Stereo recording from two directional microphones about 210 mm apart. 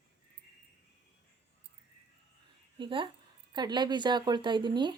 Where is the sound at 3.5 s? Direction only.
20° right (ahead or behind).